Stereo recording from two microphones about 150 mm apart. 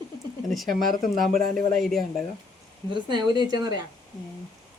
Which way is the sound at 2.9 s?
30° right (ahead or behind).